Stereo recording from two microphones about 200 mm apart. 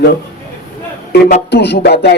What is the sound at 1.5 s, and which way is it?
Speech, 55° left (ahead or behind).